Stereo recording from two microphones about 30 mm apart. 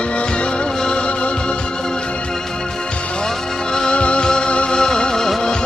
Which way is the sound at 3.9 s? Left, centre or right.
Left.